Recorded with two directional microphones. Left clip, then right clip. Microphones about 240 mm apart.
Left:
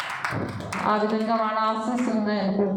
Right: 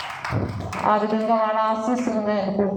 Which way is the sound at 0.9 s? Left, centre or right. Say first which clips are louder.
Right 4 dB; right.